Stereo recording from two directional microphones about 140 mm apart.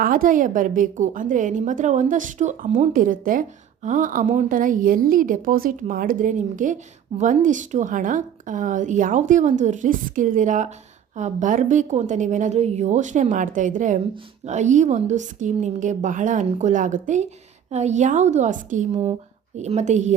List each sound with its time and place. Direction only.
0.0 s a woman's voice: 85° right; by 2.9 s 60° right (ahead or behind)
2.9 s a woman's voice: 75° right (ahead or behind)
19.5 s a woman's voice: 55° right (ahead or behind)